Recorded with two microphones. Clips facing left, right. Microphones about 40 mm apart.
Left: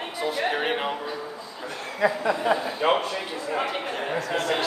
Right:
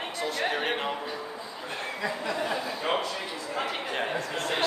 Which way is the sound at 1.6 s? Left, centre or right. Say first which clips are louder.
Left 1 dB; right.